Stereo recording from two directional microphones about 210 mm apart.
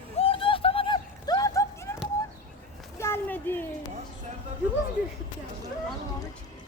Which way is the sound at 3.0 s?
10° left (ahead or behind).